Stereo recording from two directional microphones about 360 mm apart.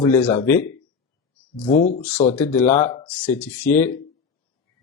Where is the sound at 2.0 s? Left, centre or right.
Centre.